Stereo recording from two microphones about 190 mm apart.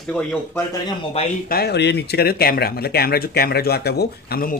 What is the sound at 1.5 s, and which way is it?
Speech, 60° left (ahead or behind).